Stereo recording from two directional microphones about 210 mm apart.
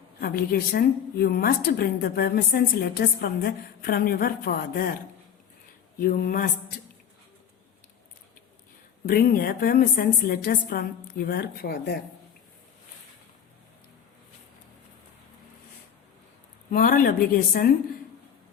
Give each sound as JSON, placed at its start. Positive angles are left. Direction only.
{"t": 0.2, "sound": "a woman's voice", "side_deg": 45}
{"t": 6.0, "sound": "a woman's voice", "side_deg": 45}
{"t": 9.0, "sound": "a woman's voice", "side_deg": 45}
{"t": 16.7, "sound": "a woman's voice", "side_deg": 40}